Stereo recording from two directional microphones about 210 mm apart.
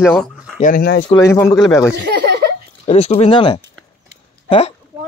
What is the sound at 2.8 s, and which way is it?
A woman's voice, 30° left (ahead or behind).